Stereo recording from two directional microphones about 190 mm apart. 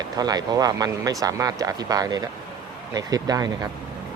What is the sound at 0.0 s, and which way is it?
Speech, 20° right (ahead or behind).